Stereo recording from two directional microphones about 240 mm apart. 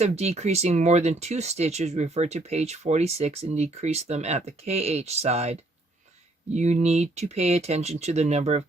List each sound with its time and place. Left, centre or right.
0.0 s speech: right